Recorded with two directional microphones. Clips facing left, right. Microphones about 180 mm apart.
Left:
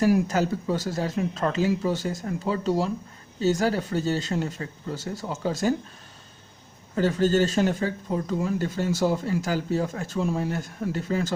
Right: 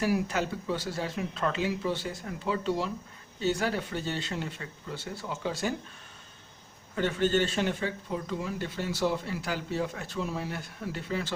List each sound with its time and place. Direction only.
0.0 s speech: 40° left (ahead or behind)
6.9 s speech: 40° left (ahead or behind)